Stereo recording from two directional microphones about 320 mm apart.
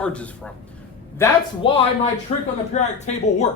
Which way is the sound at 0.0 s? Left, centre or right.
Centre.